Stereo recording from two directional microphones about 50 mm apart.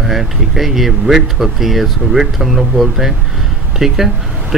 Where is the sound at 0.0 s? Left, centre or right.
Centre.